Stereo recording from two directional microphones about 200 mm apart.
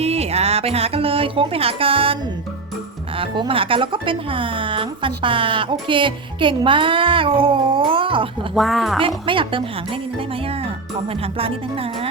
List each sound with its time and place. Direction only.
0.0 s speech: 30° right (ahead or behind)
3.2 s a woman's voice: 25° right (ahead or behind)
8.5 s a woman's voice: centre (ahead or behind)
9.0 s a woman's voice: 25° right (ahead or behind)